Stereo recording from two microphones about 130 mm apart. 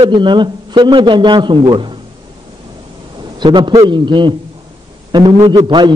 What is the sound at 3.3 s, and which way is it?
A man's voice, 35° right (ahead or behind).